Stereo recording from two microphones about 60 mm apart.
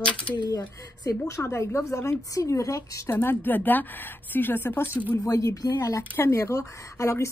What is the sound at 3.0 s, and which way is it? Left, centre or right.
A woman's voice, left.